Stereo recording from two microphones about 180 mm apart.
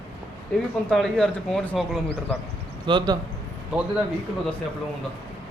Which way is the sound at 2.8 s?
25° right (ahead or behind).